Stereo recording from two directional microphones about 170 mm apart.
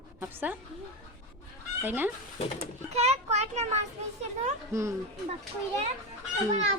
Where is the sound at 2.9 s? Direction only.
40° right (ahead or behind).